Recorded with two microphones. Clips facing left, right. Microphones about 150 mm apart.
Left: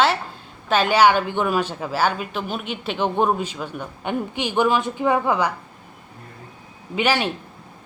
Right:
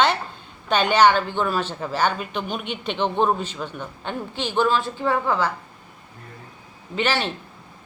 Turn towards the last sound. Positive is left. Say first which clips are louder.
# left 3 dB
turn(degrees=10)  # may be behind; listen again after turning